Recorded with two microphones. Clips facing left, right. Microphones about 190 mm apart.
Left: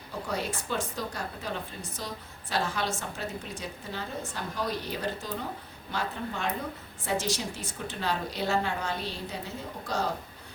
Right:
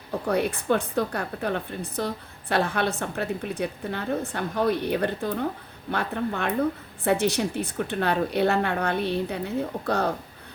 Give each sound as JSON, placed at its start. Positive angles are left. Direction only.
{"t": 0.1, "sound": "speech", "side_deg": -60}